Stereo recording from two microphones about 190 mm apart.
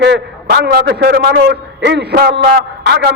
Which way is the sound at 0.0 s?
65° right (ahead or behind).